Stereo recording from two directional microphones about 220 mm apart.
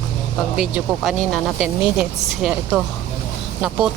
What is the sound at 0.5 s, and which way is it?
Speech, centre (ahead or behind).